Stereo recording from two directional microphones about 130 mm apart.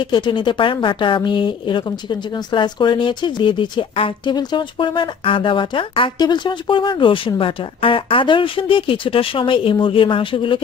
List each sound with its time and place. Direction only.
0.0 s speech: 35° left (ahead or behind)